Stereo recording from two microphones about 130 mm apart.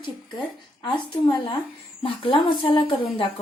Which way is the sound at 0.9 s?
35° left (ahead or behind).